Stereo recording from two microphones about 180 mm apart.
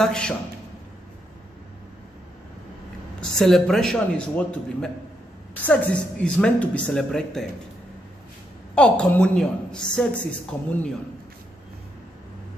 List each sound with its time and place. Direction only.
0.0 s a man's voice: 5° left (ahead or behind)
3.2 s a man's voice: centre (ahead or behind)
8.7 s a man's voice: 5° left (ahead or behind)